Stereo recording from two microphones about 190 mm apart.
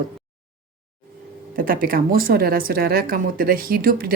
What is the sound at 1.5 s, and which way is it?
A woman's voice, 50° right (ahead or behind).